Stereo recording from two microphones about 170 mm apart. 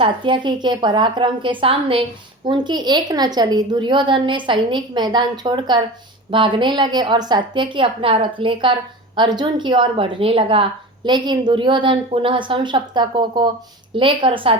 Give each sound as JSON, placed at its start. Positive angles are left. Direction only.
{"t": 0.0, "sound": "a woman's voice", "side_deg": -30}